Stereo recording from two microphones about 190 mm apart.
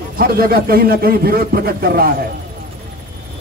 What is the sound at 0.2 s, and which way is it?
A man's voice, 50° right (ahead or behind).